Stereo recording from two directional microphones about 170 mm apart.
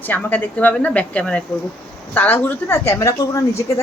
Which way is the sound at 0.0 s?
10° left (ahead or behind).